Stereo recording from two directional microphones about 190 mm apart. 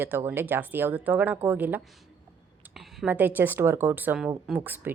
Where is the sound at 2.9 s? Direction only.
10° right (ahead or behind).